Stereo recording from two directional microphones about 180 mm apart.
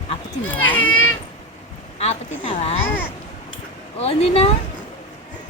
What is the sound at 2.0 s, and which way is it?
Speech, 35° left (ahead or behind).